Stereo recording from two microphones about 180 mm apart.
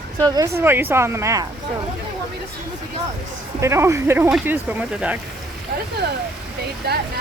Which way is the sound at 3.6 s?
15° right (ahead or behind).